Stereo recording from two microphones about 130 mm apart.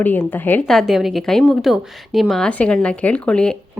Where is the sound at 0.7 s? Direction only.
Centre (ahead or behind).